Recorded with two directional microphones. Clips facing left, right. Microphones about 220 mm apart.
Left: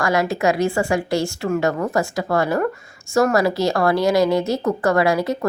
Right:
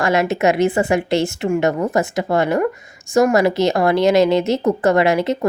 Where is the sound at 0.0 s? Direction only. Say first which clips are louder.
Right 3 dB; 25° right (ahead or behind).